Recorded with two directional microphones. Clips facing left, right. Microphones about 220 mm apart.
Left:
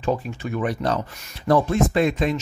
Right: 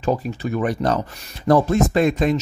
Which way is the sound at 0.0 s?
40° right (ahead or behind).